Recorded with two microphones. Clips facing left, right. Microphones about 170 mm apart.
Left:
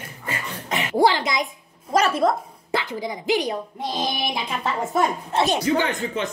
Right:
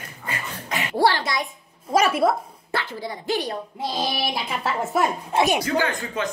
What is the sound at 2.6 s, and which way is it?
Speech, 15° left (ahead or behind).